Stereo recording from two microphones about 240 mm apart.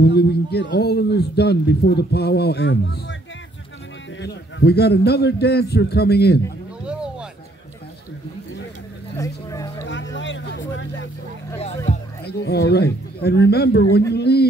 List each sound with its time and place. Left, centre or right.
0.0 s a man's voice: left
4.2 s a man's voice: left
6.8 s a sound: centre
9.1 s a sound: centre
10.1 s vehicle: left
12.3 s a man's voice: left